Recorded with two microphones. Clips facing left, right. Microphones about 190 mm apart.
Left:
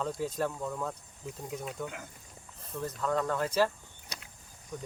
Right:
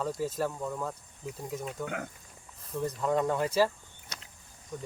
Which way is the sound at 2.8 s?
15° right (ahead or behind).